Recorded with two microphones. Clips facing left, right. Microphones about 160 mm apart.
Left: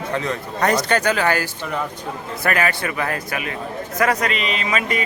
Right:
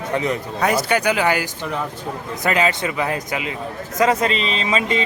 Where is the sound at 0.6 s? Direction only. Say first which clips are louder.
Left 1 dB; 5° right (ahead or behind).